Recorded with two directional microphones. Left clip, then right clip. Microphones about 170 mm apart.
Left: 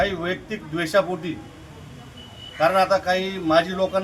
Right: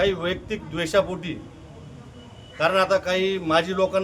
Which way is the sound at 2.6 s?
25° right (ahead or behind).